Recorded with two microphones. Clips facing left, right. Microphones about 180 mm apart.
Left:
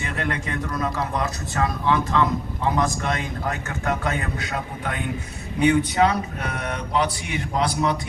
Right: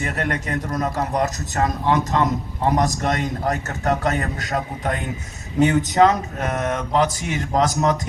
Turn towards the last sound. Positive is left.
turn(degrees=-45)  # may be behind; listen again after turning